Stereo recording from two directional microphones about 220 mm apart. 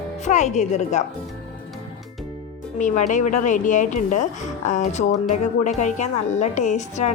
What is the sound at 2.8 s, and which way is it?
Speech, 35° left (ahead or behind).